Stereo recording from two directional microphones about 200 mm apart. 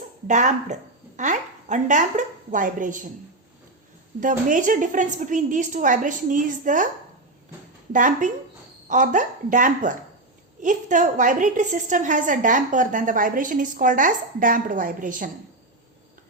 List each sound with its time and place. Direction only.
0.3 s a woman's voice: 35° right (ahead or behind)
4.2 s a woman's voice: 40° right (ahead or behind)
7.9 s a woman's voice: 40° right (ahead or behind)